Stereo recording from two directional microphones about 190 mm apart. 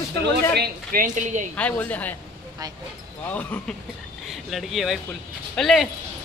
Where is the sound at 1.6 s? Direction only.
10° left (ahead or behind).